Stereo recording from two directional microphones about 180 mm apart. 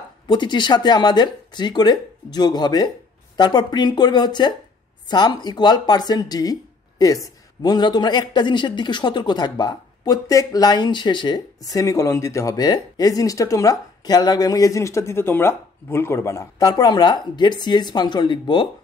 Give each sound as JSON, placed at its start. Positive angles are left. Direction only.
{"t": 0.3, "sound": "speech", "side_deg": 25}